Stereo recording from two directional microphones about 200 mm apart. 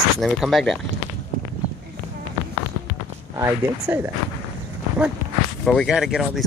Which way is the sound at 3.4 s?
10° right (ahead or behind).